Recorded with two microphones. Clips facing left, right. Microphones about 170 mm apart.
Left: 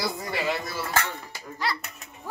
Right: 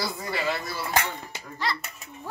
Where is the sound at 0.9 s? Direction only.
15° right (ahead or behind).